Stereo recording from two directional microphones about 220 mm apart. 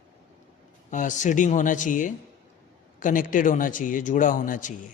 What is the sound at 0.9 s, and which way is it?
Speech, 35° left (ahead or behind).